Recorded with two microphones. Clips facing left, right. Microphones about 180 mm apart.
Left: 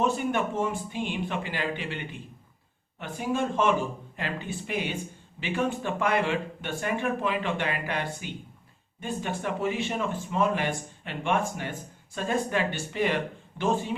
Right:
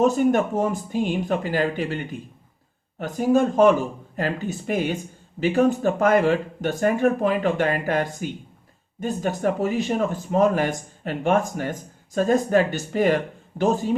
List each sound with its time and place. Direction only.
0.0 s speech: 40° right (ahead or behind)